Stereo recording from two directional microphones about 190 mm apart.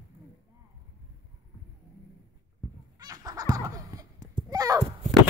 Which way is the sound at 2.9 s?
20° right (ahead or behind).